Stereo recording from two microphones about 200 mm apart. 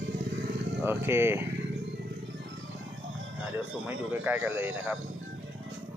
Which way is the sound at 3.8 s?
10° right (ahead or behind).